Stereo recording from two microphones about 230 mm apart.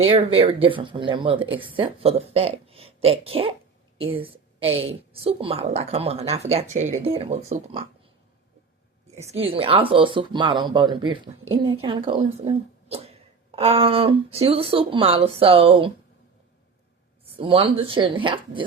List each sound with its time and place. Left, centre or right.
0.0 s speech: right
9.1 s speech: right
17.3 s speech: right